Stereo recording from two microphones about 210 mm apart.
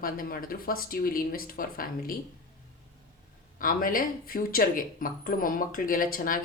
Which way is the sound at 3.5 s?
40° left (ahead or behind).